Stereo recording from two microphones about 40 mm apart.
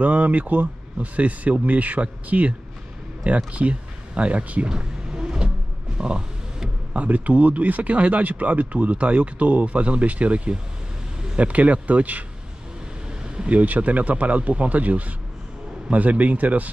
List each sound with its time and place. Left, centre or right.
0.0 s speech: right
4.6 s vehicle: centre
5.9 s a sound: right
6.9 s speech: right
13.5 s speech: right